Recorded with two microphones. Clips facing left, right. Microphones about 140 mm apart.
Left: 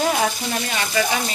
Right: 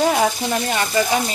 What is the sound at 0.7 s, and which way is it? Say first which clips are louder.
Frying: right 3 dB; 35° right (ahead or behind).